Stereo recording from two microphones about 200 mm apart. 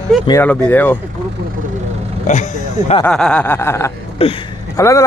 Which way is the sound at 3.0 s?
5° left (ahead or behind).